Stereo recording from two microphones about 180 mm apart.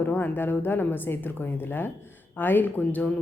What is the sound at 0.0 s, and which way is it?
A woman's voice, 10° left (ahead or behind).